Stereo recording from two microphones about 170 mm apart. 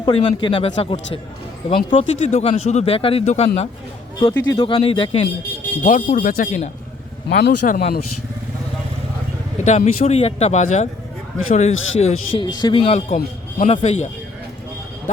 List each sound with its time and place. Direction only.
0.0 s a man's voice: 25° left (ahead or behind)
4.2 s a man's voice: 25° left (ahead or behind)
5.8 s speech: 50° left (ahead or behind)
7.3 s speech: 65° left (ahead or behind)
9.6 s speech: 40° left (ahead or behind)